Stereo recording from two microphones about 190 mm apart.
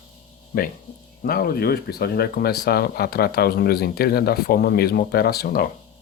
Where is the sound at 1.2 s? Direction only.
50° left (ahead or behind).